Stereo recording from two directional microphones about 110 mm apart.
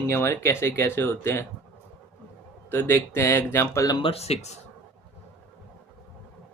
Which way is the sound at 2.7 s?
20° left (ahead or behind).